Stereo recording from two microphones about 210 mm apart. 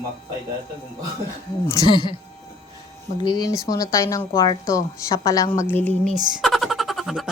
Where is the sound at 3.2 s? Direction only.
20° left (ahead or behind).